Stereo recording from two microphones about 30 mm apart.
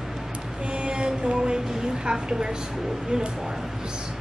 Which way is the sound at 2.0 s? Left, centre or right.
Right.